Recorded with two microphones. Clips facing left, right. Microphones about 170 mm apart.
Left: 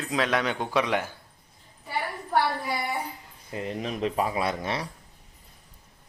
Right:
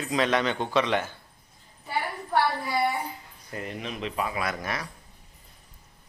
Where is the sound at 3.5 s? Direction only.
30° left (ahead or behind).